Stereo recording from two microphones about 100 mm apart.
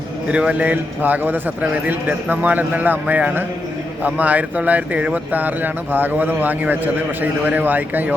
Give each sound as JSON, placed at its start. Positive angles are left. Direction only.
{"t": 0.3, "sound": "speech", "side_deg": -10}